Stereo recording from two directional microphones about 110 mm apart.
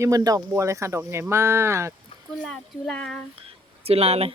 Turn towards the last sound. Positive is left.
turn(degrees=-65)  # may be behind; listen again after turning